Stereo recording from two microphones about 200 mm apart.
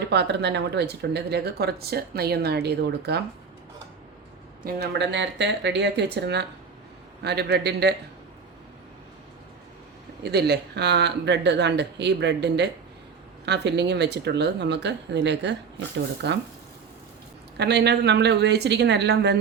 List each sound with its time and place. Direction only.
0.1 s speech: 55° right (ahead or behind)
4.6 s speech: 55° right (ahead or behind)
10.2 s speech: 55° right (ahead or behind)
17.6 s speech: 55° right (ahead or behind)